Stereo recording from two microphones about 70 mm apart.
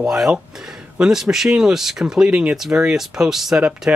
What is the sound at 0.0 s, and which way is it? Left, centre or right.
Speech, centre.